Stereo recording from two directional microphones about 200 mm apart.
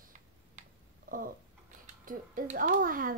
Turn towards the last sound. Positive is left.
turn(degrees=-45)  # may be behind; listen again after turning